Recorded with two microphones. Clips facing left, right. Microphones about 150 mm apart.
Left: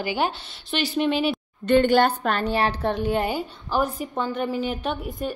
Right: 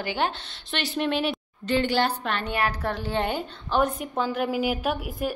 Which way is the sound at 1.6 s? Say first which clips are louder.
Left 6 dB; 55° left (ahead or behind).